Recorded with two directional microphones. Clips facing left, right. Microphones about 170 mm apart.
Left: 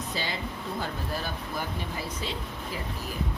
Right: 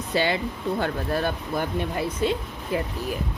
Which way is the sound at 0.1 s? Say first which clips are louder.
Right 13 dB; 65° right (ahead or behind).